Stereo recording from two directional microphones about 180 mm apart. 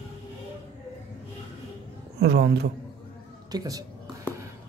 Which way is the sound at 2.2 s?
65° right (ahead or behind).